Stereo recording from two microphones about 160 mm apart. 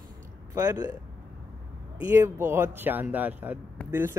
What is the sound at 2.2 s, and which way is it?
Speech, 15° right (ahead or behind).